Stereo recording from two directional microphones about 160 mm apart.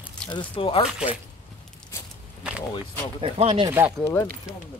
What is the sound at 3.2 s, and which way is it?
Speech, 40° right (ahead or behind).